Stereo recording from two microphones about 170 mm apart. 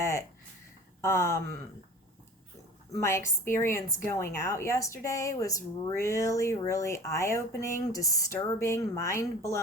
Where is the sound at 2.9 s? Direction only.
15° left (ahead or behind).